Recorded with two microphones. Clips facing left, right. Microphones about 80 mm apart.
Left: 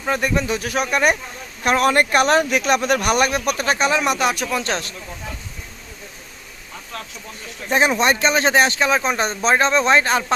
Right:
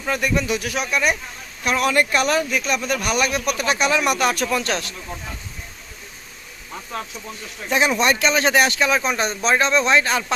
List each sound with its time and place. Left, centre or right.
0.1 s speech: left
3.6 s speech: left; by 4.4 s centre
4.5 s speech: left
6.9 s speech: centre
7.7 s speech: left